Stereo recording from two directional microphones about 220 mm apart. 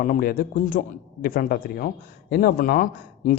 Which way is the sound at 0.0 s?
40° left (ahead or behind).